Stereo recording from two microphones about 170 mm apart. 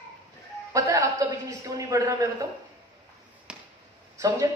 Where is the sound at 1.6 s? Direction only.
20° right (ahead or behind).